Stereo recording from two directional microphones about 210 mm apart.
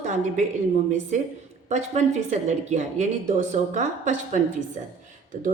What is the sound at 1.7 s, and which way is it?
Speech, 35° right (ahead or behind).